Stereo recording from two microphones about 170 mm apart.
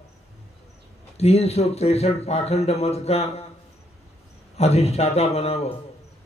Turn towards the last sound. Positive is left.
turn(degrees=40)  # may be behind; listen again after turning